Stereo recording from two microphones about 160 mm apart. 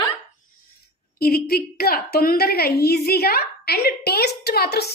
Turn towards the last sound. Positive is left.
turn(degrees=85)